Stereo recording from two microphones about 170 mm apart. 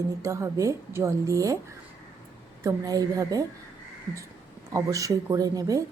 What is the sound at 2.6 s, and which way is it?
Speech, 20° right (ahead or behind).